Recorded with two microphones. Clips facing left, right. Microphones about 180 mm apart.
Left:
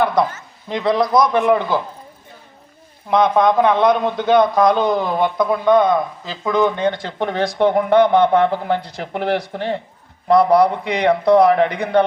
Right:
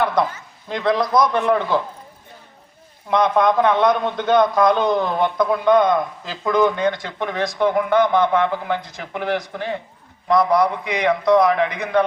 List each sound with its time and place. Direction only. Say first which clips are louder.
0.7 s a man's voice: left 2 dB; 10° left (ahead or behind)
3.5 s a man's voice: left 2 dB; 15° left (ahead or behind)
6.7 s speech: left 2 dB; 30° left (ahead or behind)